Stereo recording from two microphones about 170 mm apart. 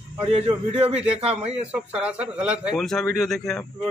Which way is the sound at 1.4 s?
35° right (ahead or behind).